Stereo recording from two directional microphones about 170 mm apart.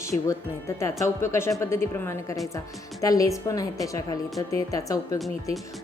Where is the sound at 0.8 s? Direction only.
15° left (ahead or behind).